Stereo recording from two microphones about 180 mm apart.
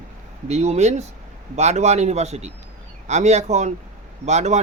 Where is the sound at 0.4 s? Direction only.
35° right (ahead or behind).